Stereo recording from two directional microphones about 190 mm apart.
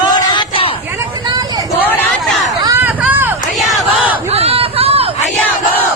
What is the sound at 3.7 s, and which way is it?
Battle cry, 10° right (ahead or behind).